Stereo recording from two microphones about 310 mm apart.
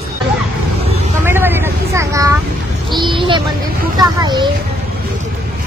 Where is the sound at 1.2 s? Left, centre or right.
Centre.